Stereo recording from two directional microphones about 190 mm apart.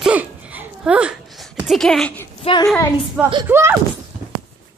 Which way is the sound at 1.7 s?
Centre (ahead or behind).